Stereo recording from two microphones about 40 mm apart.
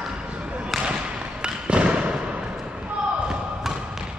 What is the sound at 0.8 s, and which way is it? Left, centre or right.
Thump, right.